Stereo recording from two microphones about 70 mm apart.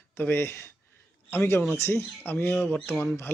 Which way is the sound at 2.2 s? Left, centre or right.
Left.